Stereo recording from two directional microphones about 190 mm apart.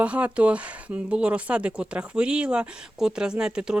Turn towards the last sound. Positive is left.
turn(degrees=-5)  # may be behind; listen again after turning